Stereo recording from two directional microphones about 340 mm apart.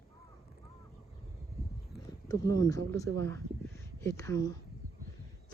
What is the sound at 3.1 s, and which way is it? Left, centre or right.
Speech, right.